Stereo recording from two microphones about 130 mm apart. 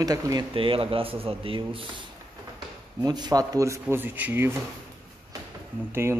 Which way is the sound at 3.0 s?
30° right (ahead or behind).